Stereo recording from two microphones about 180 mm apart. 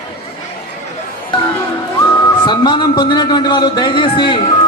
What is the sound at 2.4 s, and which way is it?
Music, 25° left (ahead or behind).